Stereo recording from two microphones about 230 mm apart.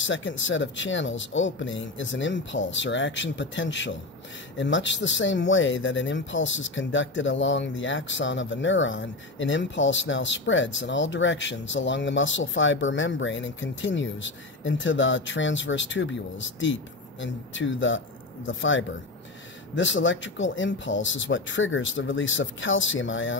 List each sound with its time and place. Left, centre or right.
0.0 s speech: left